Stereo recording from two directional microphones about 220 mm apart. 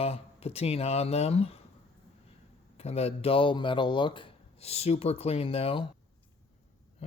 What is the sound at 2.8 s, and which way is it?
Speech, 30° left (ahead or behind).